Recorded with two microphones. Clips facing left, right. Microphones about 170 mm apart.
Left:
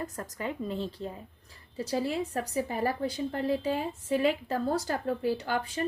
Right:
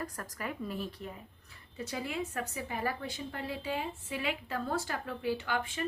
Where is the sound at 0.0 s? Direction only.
25° left (ahead or behind).